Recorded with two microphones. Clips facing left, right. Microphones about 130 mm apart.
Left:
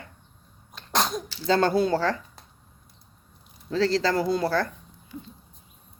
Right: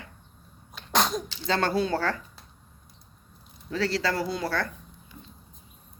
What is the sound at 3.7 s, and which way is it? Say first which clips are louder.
Speech: left 4 dB; 35° left (ahead or behind).